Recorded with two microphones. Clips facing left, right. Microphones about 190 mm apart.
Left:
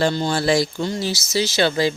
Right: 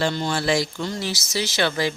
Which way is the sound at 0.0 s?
35° left (ahead or behind).